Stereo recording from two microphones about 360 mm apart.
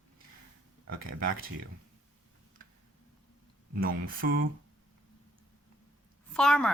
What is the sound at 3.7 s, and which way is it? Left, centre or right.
Speech, right.